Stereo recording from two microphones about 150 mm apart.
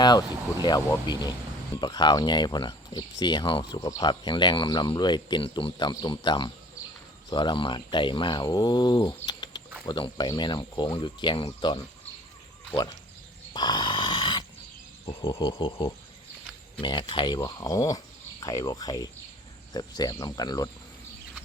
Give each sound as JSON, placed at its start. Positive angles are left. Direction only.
{"t": 0.0, "sound": "speech", "side_deg": 30}
{"t": 13.5, "sound": "dog", "side_deg": 30}
{"t": 15.3, "sound": "speech", "side_deg": 30}